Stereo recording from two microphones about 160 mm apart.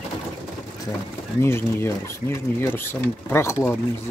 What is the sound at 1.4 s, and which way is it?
Speech, 15° left (ahead or behind).